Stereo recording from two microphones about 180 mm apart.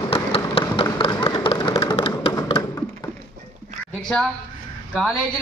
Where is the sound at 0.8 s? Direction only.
30° left (ahead or behind).